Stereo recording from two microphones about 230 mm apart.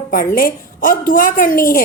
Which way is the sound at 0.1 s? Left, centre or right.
Left.